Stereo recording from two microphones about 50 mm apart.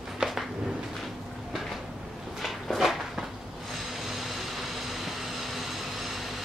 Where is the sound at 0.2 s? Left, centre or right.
Centre.